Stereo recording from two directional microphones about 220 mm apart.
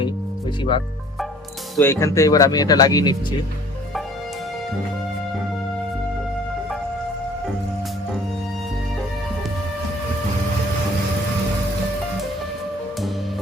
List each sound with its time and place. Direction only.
1.8 s speech: 10° left (ahead or behind)